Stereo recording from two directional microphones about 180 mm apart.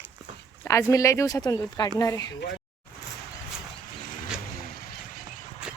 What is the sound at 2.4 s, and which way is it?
Speech, 75° left (ahead or behind).